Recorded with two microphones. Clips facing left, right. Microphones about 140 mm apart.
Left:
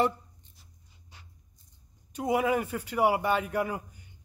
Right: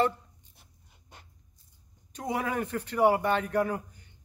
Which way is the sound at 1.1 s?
50° right (ahead or behind).